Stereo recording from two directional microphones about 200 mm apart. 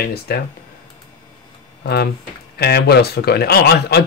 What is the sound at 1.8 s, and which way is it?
Speech, 55° left (ahead or behind).